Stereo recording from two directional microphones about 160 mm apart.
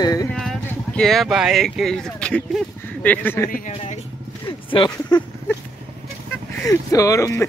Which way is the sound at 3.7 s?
45° left (ahead or behind).